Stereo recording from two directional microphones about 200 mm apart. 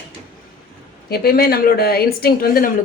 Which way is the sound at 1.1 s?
50° left (ahead or behind).